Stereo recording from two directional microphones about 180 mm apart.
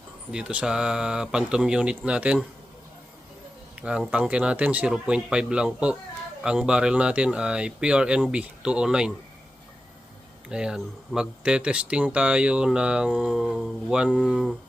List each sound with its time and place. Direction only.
0.3 s speech: 5° right (ahead or behind)
3.8 s speech: 5° right (ahead or behind)
10.5 s speech: 5° right (ahead or behind)